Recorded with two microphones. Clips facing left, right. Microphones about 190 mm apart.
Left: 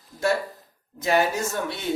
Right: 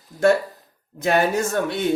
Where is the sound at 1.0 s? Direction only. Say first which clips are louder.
Right 3 dB; 55° right (ahead or behind).